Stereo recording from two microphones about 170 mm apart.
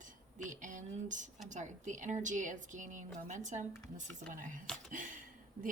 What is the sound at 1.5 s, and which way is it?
A woman's voice, 45° right (ahead or behind).